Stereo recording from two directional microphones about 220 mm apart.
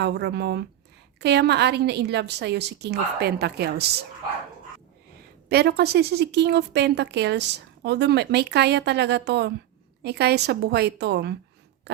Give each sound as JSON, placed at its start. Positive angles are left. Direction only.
{"t": 0.0, "sound": "a woman's voice", "side_deg": -50}
{"t": 5.5, "sound": "a woman's voice", "side_deg": -45}